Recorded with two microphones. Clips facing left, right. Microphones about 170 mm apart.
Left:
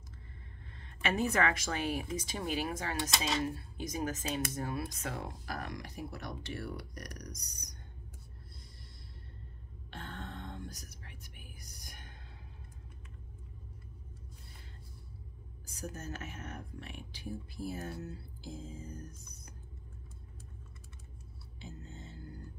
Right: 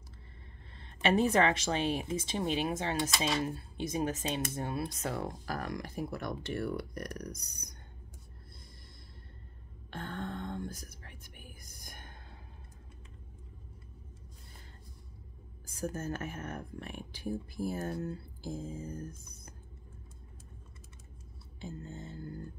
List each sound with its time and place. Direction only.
0.7 s speech: 30° right (ahead or behind)
5.0 s speech: 40° right (ahead or behind); by 7.7 s 55° right (ahead or behind)
9.8 s whispering: 50° right (ahead or behind)
15.6 s speech: 50° right (ahead or behind)
21.5 s speech: 50° right (ahead or behind)